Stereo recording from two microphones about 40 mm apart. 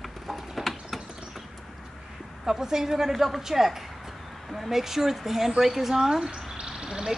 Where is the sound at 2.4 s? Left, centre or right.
Centre.